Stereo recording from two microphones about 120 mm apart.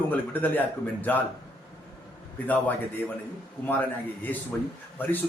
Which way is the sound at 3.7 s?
15° left (ahead or behind).